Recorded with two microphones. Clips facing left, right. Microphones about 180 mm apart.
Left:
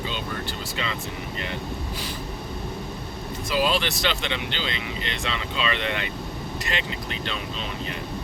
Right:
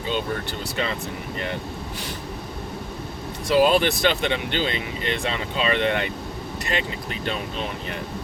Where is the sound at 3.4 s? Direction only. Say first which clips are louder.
Right 6 dB; 55° right (ahead or behind).